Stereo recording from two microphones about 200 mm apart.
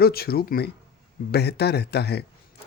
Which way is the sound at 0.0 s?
50° left (ahead or behind).